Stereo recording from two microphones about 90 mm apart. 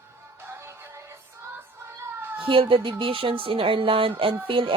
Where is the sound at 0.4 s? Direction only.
30° right (ahead or behind).